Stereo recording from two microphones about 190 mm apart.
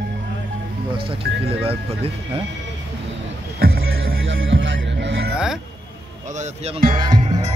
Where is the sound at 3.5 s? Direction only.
55° right (ahead or behind).